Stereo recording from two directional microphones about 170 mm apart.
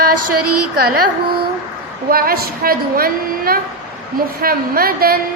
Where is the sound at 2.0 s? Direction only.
60° right (ahead or behind).